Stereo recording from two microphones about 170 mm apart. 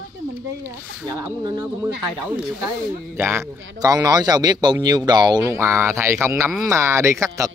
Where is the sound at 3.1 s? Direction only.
15° right (ahead or behind).